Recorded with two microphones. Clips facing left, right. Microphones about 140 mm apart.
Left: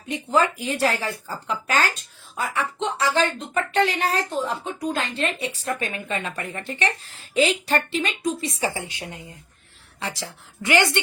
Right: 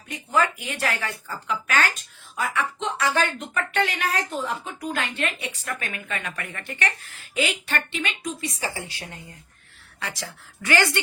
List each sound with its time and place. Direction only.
0.1 s speech: 30° left (ahead or behind)